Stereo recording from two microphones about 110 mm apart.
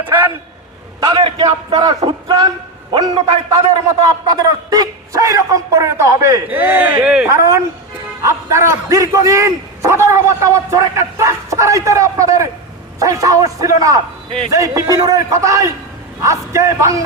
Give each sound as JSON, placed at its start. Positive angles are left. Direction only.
{"t": 0.0, "sound": "a sound", "side_deg": -20}
{"t": 1.0, "sound": "a man's voice", "side_deg": -45}
{"t": 3.2, "sound": "a man's voice", "side_deg": -65}
{"t": 3.8, "sound": "a man's voice", "side_deg": -35}
{"t": 6.5, "sound": "speech", "side_deg": -15}
{"t": 7.3, "sound": "a man's voice", "side_deg": -30}